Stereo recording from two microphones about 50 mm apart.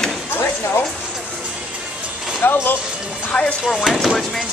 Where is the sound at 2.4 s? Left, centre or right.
Left.